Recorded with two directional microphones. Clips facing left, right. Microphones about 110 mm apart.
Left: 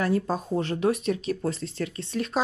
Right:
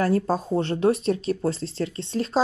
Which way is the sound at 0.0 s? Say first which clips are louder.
Right 3 dB; 40° right (ahead or behind).